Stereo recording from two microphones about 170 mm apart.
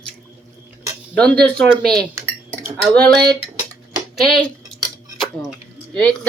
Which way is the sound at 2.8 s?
5° left (ahead or behind).